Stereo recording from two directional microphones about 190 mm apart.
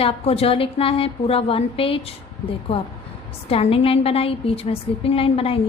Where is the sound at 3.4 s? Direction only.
30° left (ahead or behind).